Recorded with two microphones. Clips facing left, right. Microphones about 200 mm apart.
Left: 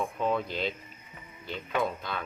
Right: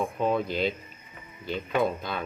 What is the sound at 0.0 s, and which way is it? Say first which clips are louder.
Speech: right 3 dB; 15° right (ahead or behind).